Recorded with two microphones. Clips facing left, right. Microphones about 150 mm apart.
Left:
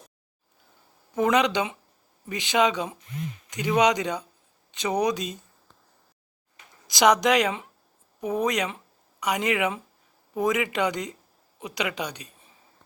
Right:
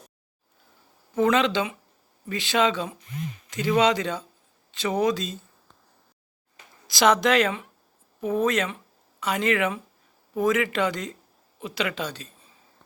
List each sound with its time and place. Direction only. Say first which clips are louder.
1.1 s speech: right 1 dB; 15° left (ahead or behind)
6.8 s speech: even; 15° left (ahead or behind)